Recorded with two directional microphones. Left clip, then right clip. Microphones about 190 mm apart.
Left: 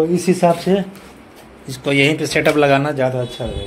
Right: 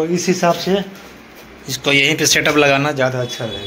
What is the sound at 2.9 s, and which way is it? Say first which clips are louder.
Speech: right 1 dB; 25° left (ahead or behind).